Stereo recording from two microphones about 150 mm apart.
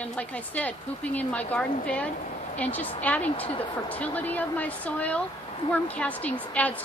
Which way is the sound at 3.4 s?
35° left (ahead or behind).